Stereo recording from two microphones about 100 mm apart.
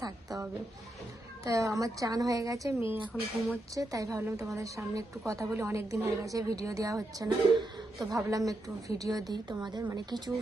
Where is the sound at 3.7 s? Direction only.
35° right (ahead or behind).